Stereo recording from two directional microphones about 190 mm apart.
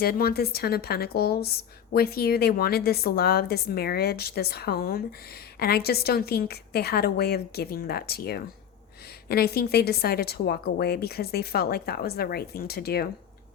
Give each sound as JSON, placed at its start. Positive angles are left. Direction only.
{"t": 0.0, "sound": "a woman's voice", "side_deg": 55}